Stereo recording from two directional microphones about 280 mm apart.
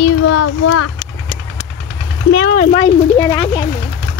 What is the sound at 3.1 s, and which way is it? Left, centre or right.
Speech, centre.